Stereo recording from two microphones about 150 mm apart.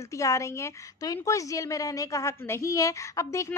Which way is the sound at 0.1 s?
20° left (ahead or behind).